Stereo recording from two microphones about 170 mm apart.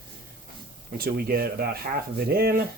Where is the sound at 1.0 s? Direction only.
60° right (ahead or behind).